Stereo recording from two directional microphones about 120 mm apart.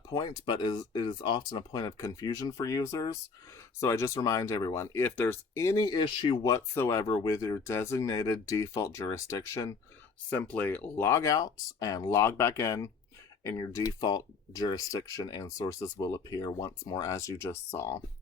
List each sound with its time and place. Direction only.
0.1 s speech: 35° left (ahead or behind)
10.2 s speech: 10° left (ahead or behind)